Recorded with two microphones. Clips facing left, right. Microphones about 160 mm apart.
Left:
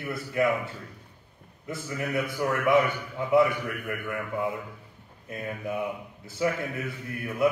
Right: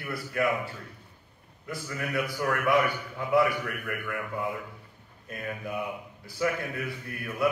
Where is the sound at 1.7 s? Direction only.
20° left (ahead or behind).